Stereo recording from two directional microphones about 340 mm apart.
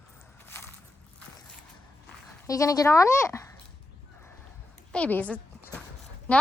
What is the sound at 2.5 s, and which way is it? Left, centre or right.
A woman's voice, centre.